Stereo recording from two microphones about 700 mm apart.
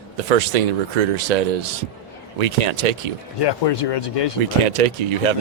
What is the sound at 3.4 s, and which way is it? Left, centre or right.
Speech, left.